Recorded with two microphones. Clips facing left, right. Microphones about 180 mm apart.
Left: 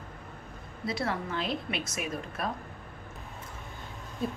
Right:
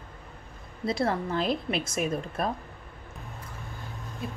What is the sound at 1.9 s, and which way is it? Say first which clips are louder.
Speech: right 6 dB; 50° right (ahead or behind).